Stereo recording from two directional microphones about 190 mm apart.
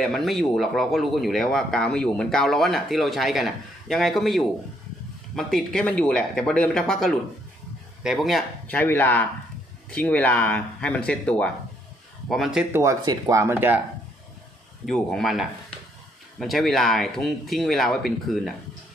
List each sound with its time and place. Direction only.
0.0 s speech: centre (ahead or behind)
12.8 s speech: 20° right (ahead or behind)
14.9 s speech: centre (ahead or behind)